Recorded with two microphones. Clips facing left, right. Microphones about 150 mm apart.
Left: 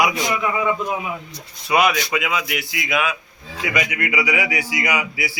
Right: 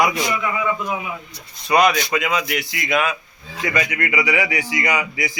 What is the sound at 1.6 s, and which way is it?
A man's voice, 5° left (ahead or behind).